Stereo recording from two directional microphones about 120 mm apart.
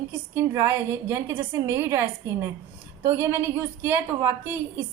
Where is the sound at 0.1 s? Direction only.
25° right (ahead or behind).